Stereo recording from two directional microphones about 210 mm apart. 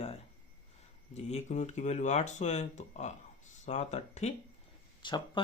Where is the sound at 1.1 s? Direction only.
30° left (ahead or behind).